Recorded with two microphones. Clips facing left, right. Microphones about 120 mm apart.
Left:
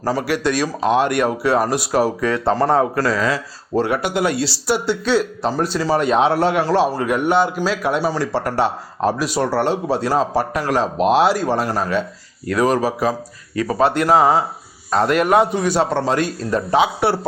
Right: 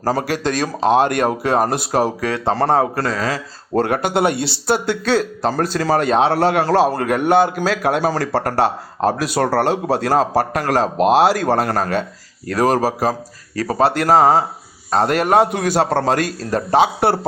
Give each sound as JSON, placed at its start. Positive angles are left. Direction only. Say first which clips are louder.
{"t": 0.2, "sound": "a man's voice", "louder": "left 1 dB", "side_deg": -40}
{"t": 2.2, "sound": "speech", "louder": "left 1 dB", "side_deg": -60}
{"t": 3.1, "sound": "a man's voice", "louder": "left 2 dB", "side_deg": -35}
{"t": 4.2, "sound": "speech", "louder": "right 2 dB", "side_deg": -25}
{"t": 4.4, "sound": "speech", "louder": "even", "side_deg": -60}
{"t": 4.7, "sound": "a man's voice", "louder": "right 1 dB", "side_deg": -45}